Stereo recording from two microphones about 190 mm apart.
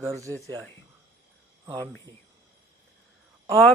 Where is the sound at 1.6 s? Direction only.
15° right (ahead or behind).